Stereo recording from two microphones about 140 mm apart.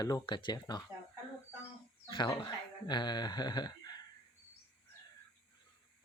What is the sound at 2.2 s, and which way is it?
Speech, 30° left (ahead or behind).